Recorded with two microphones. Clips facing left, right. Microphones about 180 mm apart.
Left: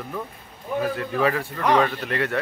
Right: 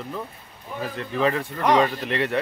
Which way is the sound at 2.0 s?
Centre (ahead or behind).